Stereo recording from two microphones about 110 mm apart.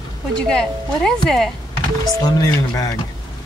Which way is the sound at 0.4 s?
5° left (ahead or behind).